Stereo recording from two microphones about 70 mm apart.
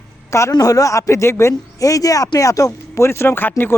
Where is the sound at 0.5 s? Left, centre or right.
Left.